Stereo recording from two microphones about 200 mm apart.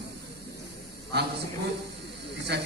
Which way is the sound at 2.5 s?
55° right (ahead or behind).